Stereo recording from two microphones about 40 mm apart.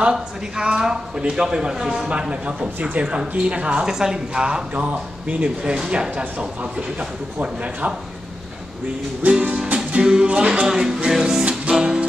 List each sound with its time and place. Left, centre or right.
0.1 s speech: centre
2.0 s speech: right
3.8 s speech: centre; by 7.9 s right
9.2 s music: right
9.9 s music: centre
10.2 s speech: right
11.1 s music: centre